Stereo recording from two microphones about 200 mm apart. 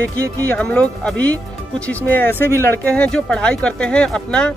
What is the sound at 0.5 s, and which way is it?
Speech, 5° left (ahead or behind).